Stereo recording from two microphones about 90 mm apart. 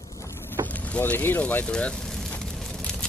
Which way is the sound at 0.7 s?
15° left (ahead or behind).